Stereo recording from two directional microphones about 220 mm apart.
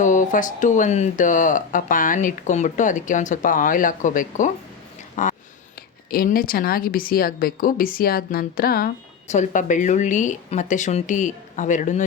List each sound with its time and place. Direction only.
0.0 s speech: 35° left (ahead or behind)